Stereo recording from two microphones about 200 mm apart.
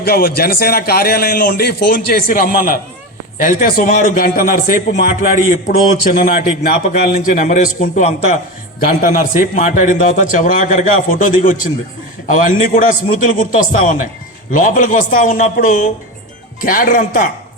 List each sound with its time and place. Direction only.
0.0 s a man's voice: 50° left (ahead or behind)
14.5 s a man's voice: 40° left (ahead or behind)